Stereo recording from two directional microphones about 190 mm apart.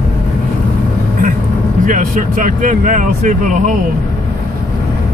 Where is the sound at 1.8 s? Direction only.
45° right (ahead or behind).